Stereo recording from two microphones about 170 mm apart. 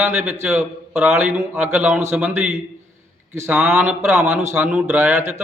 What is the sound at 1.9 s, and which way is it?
Speech, 15° right (ahead or behind).